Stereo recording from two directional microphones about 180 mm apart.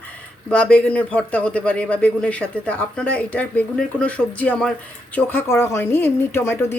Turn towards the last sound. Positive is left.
turn(degrees=15)  # may be behind; listen again after turning